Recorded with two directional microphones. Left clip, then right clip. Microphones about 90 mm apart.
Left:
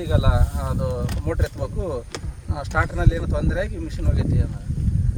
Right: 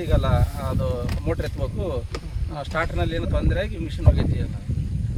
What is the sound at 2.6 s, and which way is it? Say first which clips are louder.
Speech: left 2 dB; 40° left (ahead or behind).